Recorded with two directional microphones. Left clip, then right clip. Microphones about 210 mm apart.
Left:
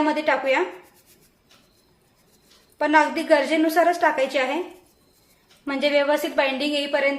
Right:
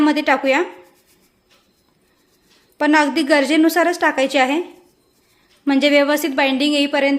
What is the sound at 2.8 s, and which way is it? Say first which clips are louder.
A woman's voice: right 3 dB; 50° right (ahead or behind).